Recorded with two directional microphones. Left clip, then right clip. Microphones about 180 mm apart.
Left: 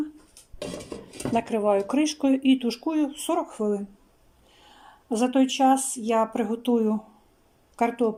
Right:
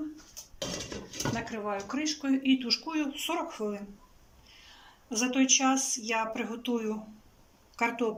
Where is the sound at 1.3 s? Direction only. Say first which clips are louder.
Left 16 dB; 45° left (ahead or behind).